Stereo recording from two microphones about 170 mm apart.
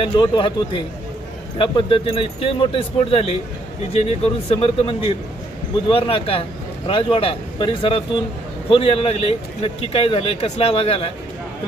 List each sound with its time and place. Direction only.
0.0 s a man's voice: 30° left (ahead or behind)